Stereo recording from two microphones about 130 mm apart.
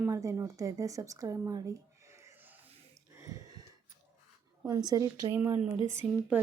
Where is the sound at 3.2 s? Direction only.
25° right (ahead or behind).